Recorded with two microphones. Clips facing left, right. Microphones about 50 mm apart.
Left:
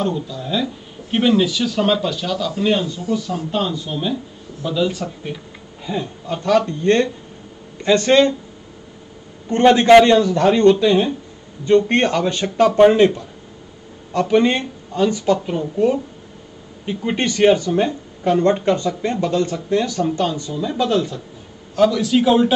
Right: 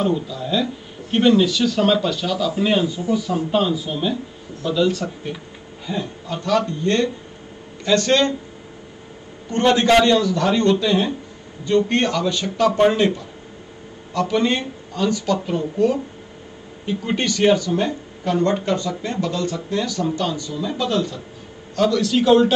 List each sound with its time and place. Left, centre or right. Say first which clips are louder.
0.0 s speech: right 1 dB; centre
6.6 s speech: left 3 dB; left
9.5 s speech: left 5 dB; centre; by 12.6 s left
12.7 s speech: left 7 dB; left
20.8 s speech: left 4 dB; centre